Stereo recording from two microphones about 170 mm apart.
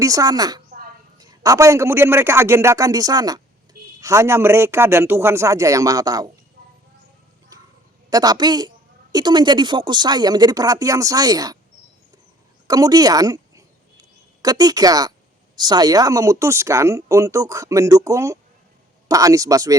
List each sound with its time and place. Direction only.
0.0 s a man's voice: 20° right (ahead or behind)
8.1 s speech: 25° right (ahead or behind)
12.6 s a woman's voice: 20° right (ahead or behind)